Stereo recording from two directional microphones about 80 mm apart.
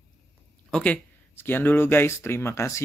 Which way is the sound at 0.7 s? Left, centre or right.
Centre.